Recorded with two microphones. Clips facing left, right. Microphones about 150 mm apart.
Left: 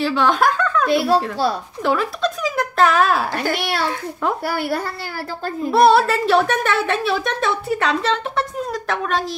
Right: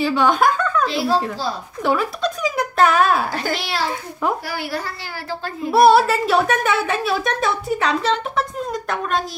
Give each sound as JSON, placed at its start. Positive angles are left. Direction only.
{"t": 0.0, "sound": "giggle", "side_deg": 0}
{"t": 0.8, "sound": "speech", "side_deg": 60}
{"t": 1.8, "sound": "a woman's voice", "side_deg": 0}
{"t": 3.5, "sound": "speech", "side_deg": 60}
{"t": 5.7, "sound": "a woman's voice", "side_deg": -5}